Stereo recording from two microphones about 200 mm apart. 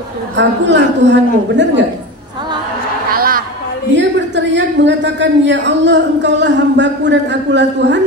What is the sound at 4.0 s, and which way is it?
A woman's voice, 65° right (ahead or behind).